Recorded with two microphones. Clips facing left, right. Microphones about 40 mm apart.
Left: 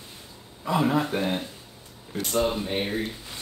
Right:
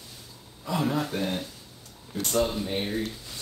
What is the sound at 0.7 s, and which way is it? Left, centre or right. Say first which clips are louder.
Speech: left 4 dB; centre.